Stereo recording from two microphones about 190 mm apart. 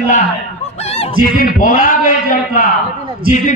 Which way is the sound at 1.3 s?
45° left (ahead or behind).